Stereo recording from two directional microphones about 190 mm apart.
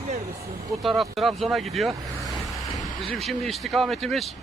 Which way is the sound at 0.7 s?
Centre (ahead or behind).